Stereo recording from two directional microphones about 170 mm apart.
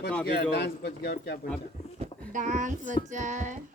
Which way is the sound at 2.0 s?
45° right (ahead or behind).